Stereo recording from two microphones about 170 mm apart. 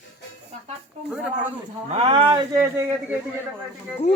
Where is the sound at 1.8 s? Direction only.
35° right (ahead or behind).